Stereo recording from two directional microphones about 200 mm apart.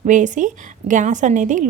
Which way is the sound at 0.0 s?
40° right (ahead or behind).